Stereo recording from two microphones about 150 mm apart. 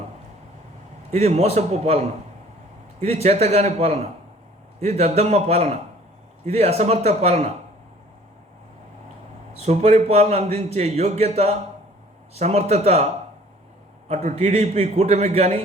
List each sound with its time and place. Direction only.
1.1 s a man's voice: 45° right (ahead or behind)
9.6 s a man's voice: 45° right (ahead or behind)
14.1 s a man's voice: 50° right (ahead or behind)